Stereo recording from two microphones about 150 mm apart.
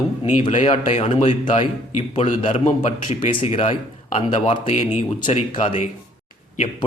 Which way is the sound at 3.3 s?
40° left (ahead or behind).